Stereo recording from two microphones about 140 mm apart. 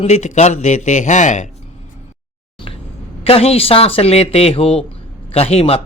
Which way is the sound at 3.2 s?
45° left (ahead or behind).